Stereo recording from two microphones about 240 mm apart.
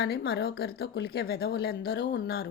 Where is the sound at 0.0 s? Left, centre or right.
Left.